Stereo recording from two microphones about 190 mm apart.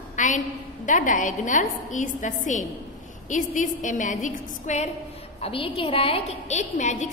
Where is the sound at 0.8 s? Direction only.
40° left (ahead or behind).